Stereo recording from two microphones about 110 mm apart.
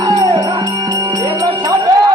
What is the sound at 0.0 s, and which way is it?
Music, 45° right (ahead or behind).